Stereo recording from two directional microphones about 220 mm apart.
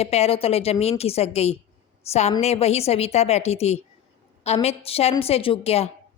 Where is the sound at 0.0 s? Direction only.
30° left (ahead or behind).